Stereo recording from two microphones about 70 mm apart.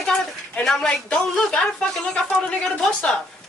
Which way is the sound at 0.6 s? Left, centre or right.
Centre.